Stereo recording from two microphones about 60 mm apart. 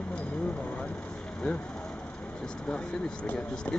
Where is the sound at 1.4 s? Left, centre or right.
Centre.